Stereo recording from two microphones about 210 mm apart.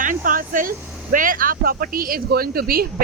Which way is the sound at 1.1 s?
40° right (ahead or behind).